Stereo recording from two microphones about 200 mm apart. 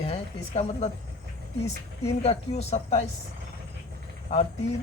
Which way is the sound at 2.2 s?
30° left (ahead or behind).